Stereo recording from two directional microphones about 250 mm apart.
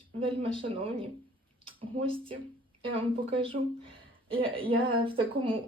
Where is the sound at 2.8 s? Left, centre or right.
Right.